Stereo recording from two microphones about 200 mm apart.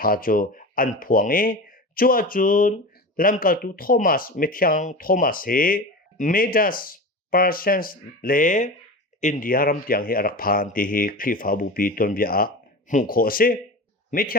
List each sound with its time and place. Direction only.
0.0 s speech: 45° left (ahead or behind)